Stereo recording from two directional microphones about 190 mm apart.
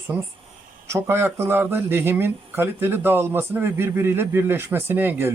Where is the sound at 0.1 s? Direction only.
10° right (ahead or behind).